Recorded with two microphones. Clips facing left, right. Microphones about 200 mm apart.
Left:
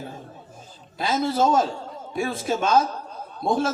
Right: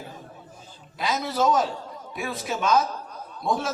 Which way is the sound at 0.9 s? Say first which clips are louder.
Left 3 dB; 30° left (ahead or behind).